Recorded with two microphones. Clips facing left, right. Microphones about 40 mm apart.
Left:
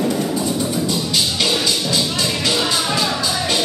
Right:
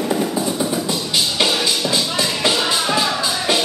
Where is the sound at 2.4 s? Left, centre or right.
Centre.